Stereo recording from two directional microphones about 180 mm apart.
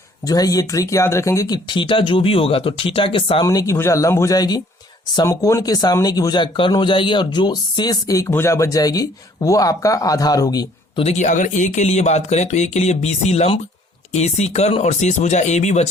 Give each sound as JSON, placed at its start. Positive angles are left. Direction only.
{"t": 0.3, "sound": "speech", "side_deg": 20}
{"t": 3.4, "sound": "speech", "side_deg": 20}
{"t": 11.0, "sound": "speech", "side_deg": 40}